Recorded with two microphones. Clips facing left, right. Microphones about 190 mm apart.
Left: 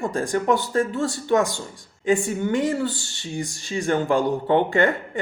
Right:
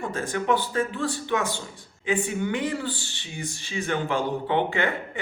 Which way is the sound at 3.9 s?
50° left (ahead or behind).